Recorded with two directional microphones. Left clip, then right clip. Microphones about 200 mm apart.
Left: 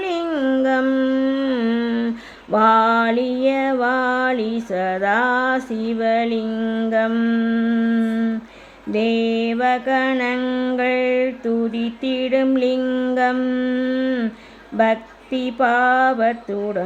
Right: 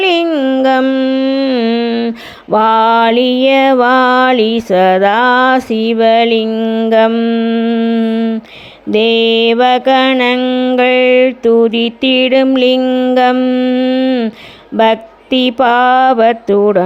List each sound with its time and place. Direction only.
0.0 s a sound: 30° right (ahead or behind)
0.3 s mantra: 20° right (ahead or behind)
2.5 s mantra: 30° right (ahead or behind)
6.5 s mantra: 20° right (ahead or behind)
10.4 s music: 20° right (ahead or behind)
10.8 s mantra: 35° right (ahead or behind)
14.8 s mantra: 30° right (ahead or behind)